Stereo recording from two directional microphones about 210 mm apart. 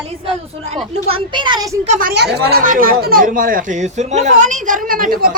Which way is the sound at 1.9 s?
40° right (ahead or behind).